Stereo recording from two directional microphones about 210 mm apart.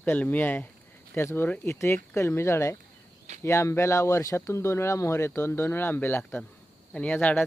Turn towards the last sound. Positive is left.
turn(degrees=10)  # may be behind; listen again after turning